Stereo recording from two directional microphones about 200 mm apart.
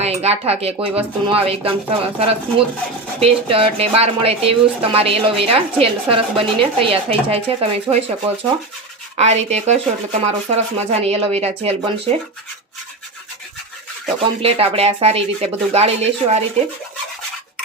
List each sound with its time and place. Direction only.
0.0 s speech: 30° right (ahead or behind)
9.1 s speech: 35° right (ahead or behind)
14.2 s speech: 30° right (ahead or behind)